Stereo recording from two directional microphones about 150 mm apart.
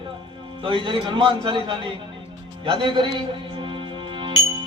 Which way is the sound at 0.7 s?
35° right (ahead or behind).